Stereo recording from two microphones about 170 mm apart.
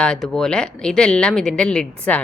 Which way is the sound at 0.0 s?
5° left (ahead or behind).